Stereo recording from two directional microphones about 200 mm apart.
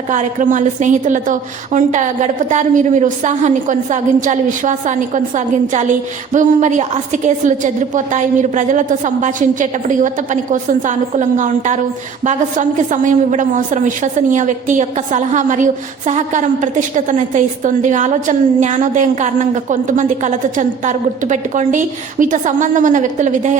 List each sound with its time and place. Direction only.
0.1 s a woman's voice: 40° right (ahead or behind)